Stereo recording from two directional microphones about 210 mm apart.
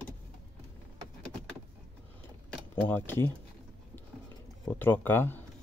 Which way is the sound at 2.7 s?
10° left (ahead or behind).